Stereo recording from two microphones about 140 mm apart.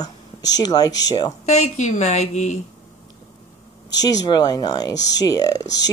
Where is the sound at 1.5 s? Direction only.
55° left (ahead or behind).